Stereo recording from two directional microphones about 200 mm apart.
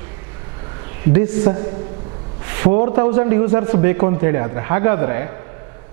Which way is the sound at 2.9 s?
15° right (ahead or behind).